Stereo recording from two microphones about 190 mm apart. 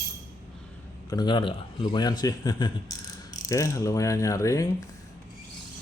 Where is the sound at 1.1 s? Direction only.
25° left (ahead or behind).